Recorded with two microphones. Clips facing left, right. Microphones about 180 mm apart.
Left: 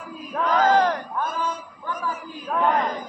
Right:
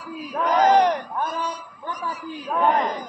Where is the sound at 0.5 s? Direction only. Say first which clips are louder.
Right 2 dB; 20° right (ahead or behind).